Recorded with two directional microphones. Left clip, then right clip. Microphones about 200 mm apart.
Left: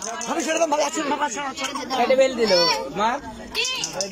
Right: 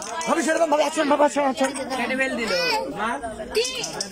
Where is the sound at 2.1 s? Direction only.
20° left (ahead or behind).